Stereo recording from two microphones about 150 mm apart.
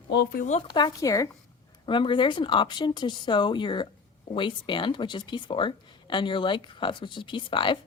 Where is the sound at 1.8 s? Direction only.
35° left (ahead or behind).